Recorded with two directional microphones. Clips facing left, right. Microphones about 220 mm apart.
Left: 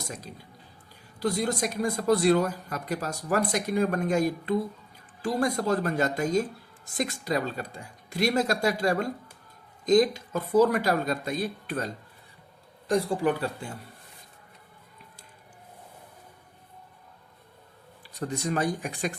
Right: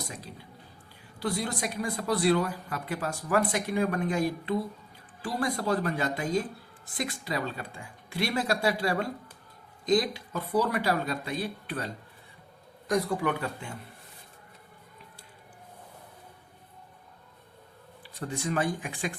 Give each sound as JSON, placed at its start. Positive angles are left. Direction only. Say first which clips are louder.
{"t": 1.2, "sound": "speech", "louder": "left 4 dB", "side_deg": 45}
{"t": 12.9, "sound": "speech", "louder": "left 3 dB", "side_deg": 30}
{"t": 18.0, "sound": "speech", "louder": "left 3 dB", "side_deg": 40}